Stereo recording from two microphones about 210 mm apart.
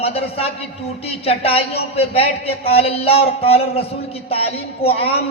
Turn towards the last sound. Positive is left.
turn(degrees=30)  # may be behind; listen again after turning